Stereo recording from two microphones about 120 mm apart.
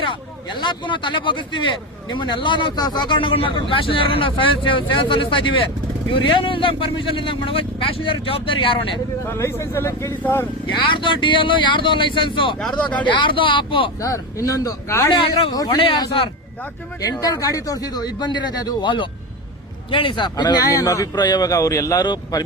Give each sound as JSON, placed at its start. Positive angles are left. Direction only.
{"t": 0.6, "sound": "speech", "side_deg": 40}
{"t": 9.2, "sound": "speech", "side_deg": 20}
{"t": 10.8, "sound": "speech", "side_deg": 45}
{"t": 12.6, "sound": "speech", "side_deg": 10}
{"t": 13.1, "sound": "speech", "side_deg": 40}
{"t": 14.0, "sound": "speech", "side_deg": 30}
{"t": 17.0, "sound": "speech", "side_deg": 30}